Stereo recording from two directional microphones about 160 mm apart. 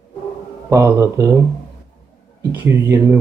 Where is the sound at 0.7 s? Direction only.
20° right (ahead or behind).